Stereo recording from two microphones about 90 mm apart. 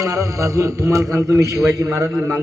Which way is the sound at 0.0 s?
35° right (ahead or behind).